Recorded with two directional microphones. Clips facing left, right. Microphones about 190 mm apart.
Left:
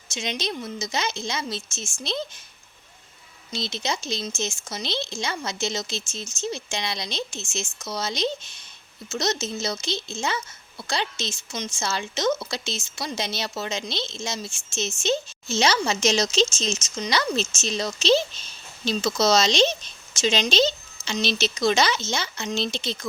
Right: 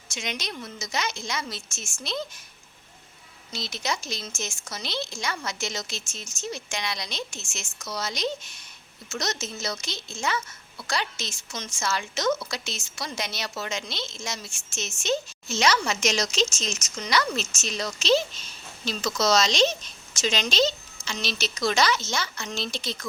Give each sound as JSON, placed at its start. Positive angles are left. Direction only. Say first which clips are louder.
{"t": 0.1, "sound": "a woman's voice", "louder": "left 5 dB", "side_deg": 25}
{"t": 3.5, "sound": "a woman's voice", "louder": "left 2 dB", "side_deg": 25}